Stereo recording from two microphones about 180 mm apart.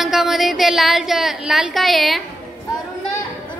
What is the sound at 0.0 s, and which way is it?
Speech, centre (ahead or behind).